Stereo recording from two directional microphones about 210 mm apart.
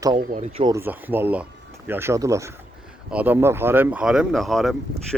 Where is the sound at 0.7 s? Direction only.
10° right (ahead or behind).